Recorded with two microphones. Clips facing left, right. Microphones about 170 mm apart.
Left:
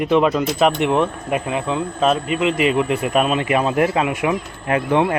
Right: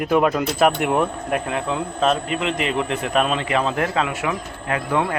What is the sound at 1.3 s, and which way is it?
A man's voice, 5° left (ahead or behind).